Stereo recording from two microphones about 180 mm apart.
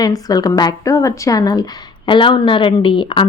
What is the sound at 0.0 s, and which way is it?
Speech, 20° left (ahead or behind).